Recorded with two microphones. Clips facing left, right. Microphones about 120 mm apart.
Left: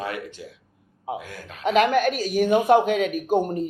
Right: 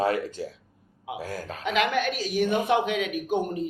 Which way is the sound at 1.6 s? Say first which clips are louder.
Left 6 dB; 45° left (ahead or behind).